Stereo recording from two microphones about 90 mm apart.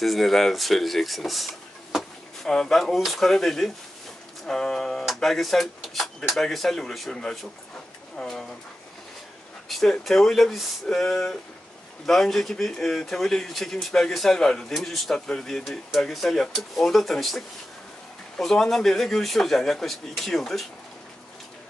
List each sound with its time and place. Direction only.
0.0 s speech: centre (ahead or behind)
9.7 s speech: centre (ahead or behind)
18.4 s speech: 5° left (ahead or behind)